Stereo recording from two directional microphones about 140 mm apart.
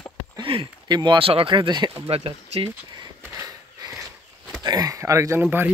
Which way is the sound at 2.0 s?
45° right (ahead or behind).